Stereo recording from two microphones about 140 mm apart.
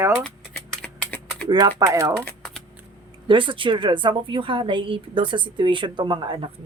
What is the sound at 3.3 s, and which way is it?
Speech, 35° right (ahead or behind).